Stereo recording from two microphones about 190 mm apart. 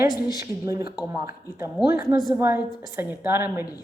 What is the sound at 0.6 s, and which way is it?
A woman's voice, 15° right (ahead or behind).